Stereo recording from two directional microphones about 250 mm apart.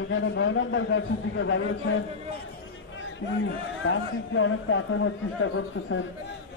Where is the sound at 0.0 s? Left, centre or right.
Left.